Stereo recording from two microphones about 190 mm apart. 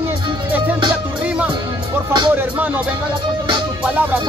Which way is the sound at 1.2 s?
5° right (ahead or behind).